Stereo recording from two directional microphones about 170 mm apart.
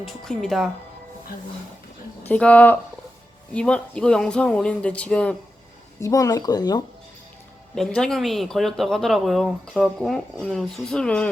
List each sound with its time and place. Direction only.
0.0 s speech: centre (ahead or behind)
2.2 s speech: 10° left (ahead or behind)
6.0 s speech: 20° left (ahead or behind)
7.8 s speech: 5° left (ahead or behind)